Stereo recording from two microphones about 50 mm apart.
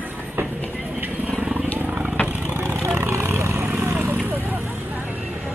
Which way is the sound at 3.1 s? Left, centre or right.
Right.